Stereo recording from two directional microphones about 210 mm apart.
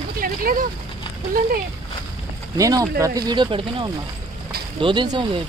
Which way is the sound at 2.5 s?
15° right (ahead or behind).